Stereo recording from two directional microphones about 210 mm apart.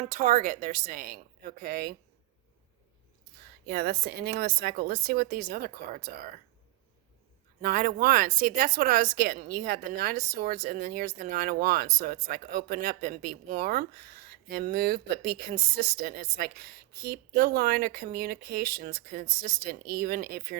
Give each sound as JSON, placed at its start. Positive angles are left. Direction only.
{"t": 0.0, "sound": "a woman's voice", "side_deg": -35}
{"t": 3.7, "sound": "speech", "side_deg": -45}
{"t": 7.6, "sound": "speech", "side_deg": -45}